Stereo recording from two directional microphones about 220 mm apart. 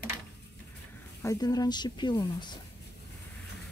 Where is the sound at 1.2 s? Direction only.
15° left (ahead or behind).